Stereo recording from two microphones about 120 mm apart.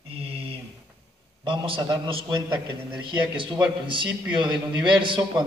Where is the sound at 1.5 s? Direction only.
45° right (ahead or behind).